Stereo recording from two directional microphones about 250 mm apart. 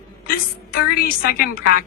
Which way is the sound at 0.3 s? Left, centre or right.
Left.